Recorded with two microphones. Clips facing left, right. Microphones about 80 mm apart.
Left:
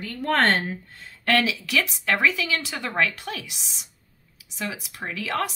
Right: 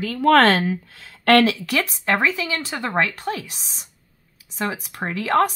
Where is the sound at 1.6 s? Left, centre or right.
Right.